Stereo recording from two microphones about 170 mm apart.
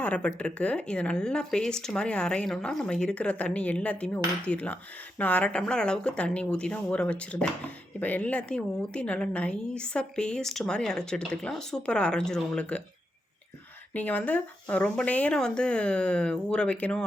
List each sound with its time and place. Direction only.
0.0 s speech: 5° left (ahead or behind)
13.9 s speech: 10° left (ahead or behind)